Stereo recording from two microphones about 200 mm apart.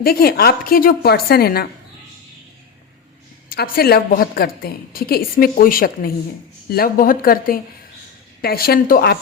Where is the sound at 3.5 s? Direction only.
50° left (ahead or behind).